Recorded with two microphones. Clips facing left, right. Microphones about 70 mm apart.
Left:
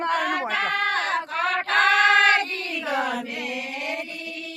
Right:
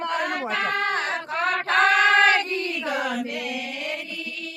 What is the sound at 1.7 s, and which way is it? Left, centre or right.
Choir, centre.